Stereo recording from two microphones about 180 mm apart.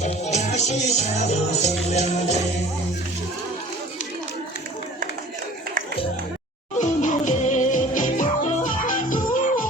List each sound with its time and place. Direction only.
0.0 s music: 40° left (ahead or behind)
6.7 s music: 45° left (ahead or behind)